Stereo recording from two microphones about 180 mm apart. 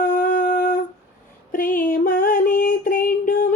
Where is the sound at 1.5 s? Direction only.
50° left (ahead or behind).